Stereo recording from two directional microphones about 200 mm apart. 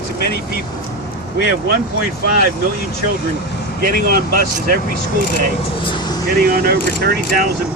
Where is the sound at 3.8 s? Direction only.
50° right (ahead or behind).